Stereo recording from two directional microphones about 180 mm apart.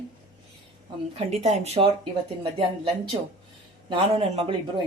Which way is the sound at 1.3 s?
35° right (ahead or behind).